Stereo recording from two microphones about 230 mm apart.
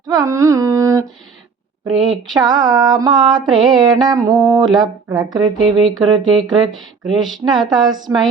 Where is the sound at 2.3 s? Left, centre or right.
Centre.